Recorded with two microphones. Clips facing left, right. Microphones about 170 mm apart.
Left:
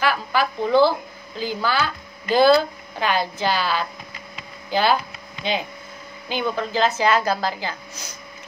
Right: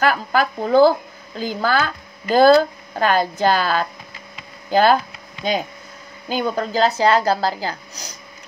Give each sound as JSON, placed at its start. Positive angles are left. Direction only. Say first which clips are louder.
{"t": 0.0, "sound": "speech", "louder": "right 3 dB", "side_deg": -45}